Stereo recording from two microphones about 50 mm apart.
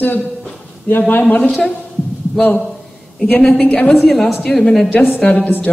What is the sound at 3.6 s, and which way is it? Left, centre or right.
Speech, left.